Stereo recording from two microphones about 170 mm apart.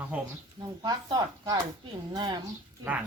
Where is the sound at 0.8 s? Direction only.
25° right (ahead or behind).